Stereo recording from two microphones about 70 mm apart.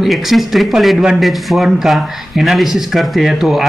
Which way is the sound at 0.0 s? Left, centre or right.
Centre.